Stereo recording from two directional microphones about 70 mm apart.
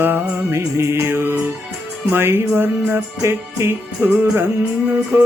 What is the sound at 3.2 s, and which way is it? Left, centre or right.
Music, right.